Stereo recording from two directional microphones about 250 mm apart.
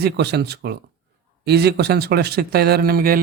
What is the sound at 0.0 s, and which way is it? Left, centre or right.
Speech, right.